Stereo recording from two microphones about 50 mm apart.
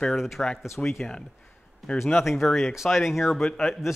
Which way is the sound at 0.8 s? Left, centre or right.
Left.